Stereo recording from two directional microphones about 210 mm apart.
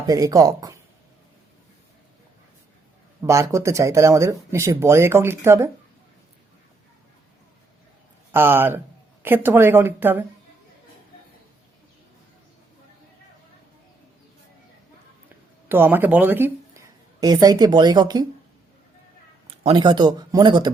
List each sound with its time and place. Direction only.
0.1 s speech: 20° right (ahead or behind)
3.2 s speech: 15° right (ahead or behind)
8.3 s speech: 10° right (ahead or behind)
15.7 s a woman's voice: 10° right (ahead or behind)
19.5 s speech: 25° right (ahead or behind)